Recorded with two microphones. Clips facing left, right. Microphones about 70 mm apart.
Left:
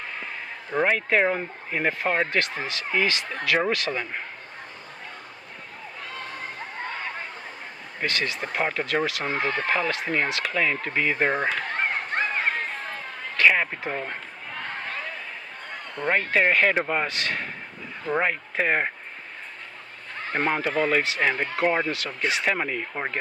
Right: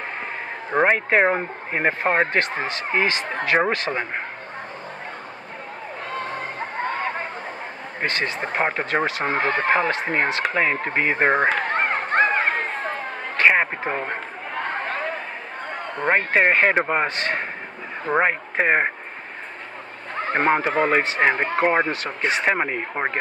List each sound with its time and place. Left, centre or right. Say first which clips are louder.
0.7 s speech: right 4 dB; right
6.0 s a sound: right 7 dB; right
15.7 s speech: right 4 dB; right
20.2 s speech: right 6 dB; right